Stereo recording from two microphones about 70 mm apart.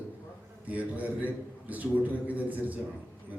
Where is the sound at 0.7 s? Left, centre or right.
Right.